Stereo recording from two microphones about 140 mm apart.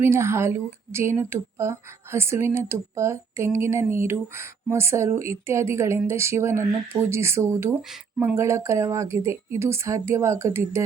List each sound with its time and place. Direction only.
0.0 s a woman's voice: 20° right (ahead or behind)